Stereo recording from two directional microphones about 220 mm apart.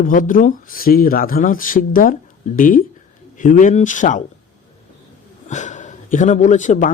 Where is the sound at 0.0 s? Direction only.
35° left (ahead or behind).